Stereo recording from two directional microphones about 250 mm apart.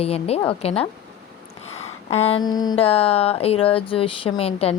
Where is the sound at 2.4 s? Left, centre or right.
Centre.